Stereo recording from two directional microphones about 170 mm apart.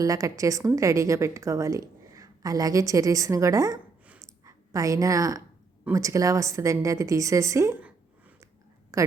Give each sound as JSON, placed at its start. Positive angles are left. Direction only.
{"t": 0.0, "sound": "a woman's voice", "side_deg": -20}
{"t": 4.0, "sound": "a sound", "side_deg": -10}
{"t": 4.4, "sound": "a woman's voice", "side_deg": -20}